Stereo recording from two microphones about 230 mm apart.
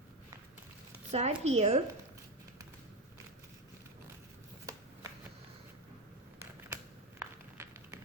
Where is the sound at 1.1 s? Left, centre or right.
Right.